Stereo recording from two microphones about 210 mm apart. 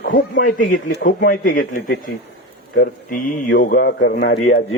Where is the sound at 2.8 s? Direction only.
45° left (ahead or behind).